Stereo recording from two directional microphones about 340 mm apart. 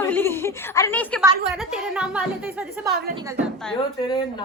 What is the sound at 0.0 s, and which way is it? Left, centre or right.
A woman's voice, centre.